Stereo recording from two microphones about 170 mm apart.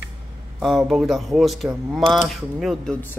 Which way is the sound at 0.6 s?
Centre (ahead or behind).